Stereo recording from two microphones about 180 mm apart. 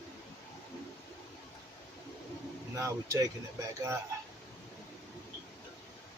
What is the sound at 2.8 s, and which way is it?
Speech, 15° right (ahead or behind).